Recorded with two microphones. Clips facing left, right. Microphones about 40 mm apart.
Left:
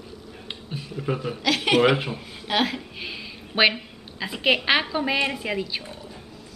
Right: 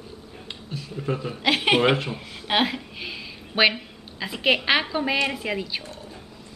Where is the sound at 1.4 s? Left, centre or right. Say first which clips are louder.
Even; right.